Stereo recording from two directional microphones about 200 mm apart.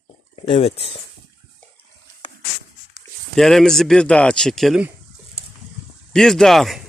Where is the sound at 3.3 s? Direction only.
Centre (ahead or behind).